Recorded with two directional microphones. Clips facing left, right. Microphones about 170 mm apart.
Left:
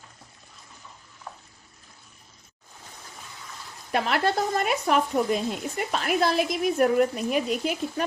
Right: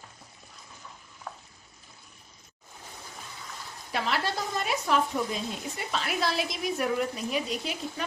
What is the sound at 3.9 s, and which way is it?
Speech, 55° left (ahead or behind).